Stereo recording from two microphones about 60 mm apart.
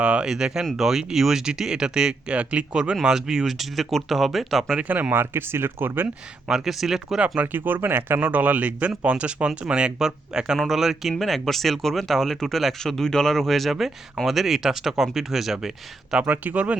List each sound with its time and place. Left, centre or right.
0.0 s speech: centre
4.8 s speech: right
5.2 s speech: right
6.5 s speech: centre
7.4 s speech: right
8.2 s speech: right; by 15.5 s centre
16.1 s speech: right